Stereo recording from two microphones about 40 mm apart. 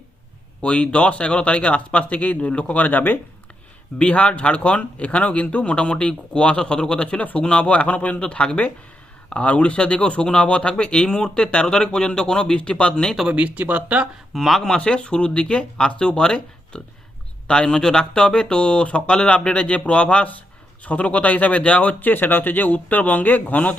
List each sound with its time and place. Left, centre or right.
0.6 s a man's voice: left
3.9 s a man's voice: left
13.3 s speech: right
14.3 s speech: centre
14.8 s a man's voice: left
22.0 s speech: left